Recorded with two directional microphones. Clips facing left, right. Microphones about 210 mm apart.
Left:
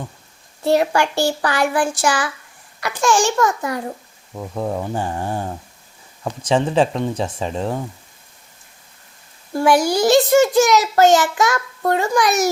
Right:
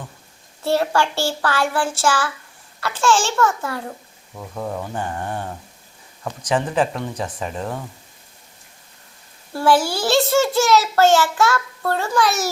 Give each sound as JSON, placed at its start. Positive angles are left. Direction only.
{"t": 0.6, "sound": "a child's voice", "side_deg": 15}
{"t": 4.4, "sound": "speech", "side_deg": 25}
{"t": 9.5, "sound": "a child's voice", "side_deg": 15}